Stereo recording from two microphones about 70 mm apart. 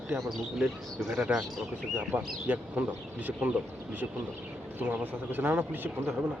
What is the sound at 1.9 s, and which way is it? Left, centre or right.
Speech, right.